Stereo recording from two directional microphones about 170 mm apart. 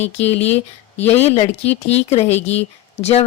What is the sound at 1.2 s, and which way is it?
Speech, 40° left (ahead or behind).